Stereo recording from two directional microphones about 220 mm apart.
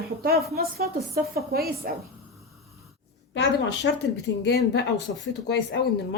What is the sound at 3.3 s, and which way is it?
Speech, 55° left (ahead or behind).